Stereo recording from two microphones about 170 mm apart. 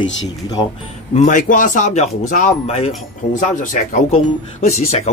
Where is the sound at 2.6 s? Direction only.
35° left (ahead or behind).